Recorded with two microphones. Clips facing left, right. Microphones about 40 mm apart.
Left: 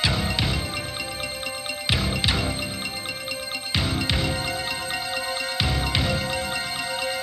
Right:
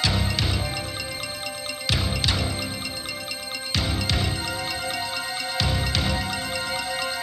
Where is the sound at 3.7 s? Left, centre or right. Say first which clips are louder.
Left 1 dB; centre.